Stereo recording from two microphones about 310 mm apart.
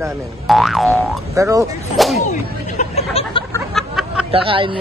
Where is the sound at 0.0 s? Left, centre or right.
Centre.